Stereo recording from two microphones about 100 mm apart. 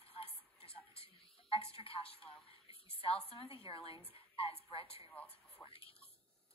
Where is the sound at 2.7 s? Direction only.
70° left (ahead or behind).